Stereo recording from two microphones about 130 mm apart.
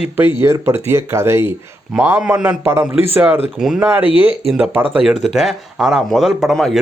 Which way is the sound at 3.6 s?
5° right (ahead or behind).